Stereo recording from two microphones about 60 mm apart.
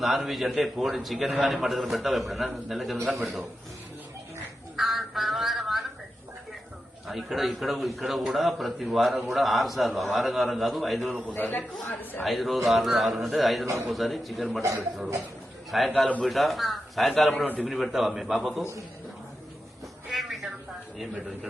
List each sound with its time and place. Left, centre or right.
0.0 s a man's voice: centre
4.8 s a sound: centre
7.1 s a man's voice: centre
11.3 s a man's voice: left
12.2 s a man's voice: centre
17.3 s a man's voice: left
17.7 s a man's voice: centre
20.1 s a sound: centre